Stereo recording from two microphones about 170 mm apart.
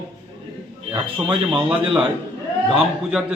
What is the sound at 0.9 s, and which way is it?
Speech, 30° right (ahead or behind).